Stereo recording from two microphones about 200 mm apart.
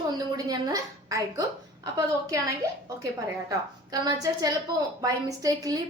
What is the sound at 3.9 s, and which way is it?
A woman's voice, 20° right (ahead or behind).